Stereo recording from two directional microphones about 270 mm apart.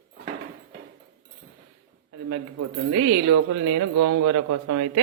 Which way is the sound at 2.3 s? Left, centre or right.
Right.